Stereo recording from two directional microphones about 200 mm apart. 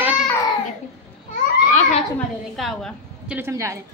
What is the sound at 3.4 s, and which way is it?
Speech, 15° right (ahead or behind).